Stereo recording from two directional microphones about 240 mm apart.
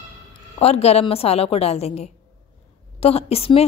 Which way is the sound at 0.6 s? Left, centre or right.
Left.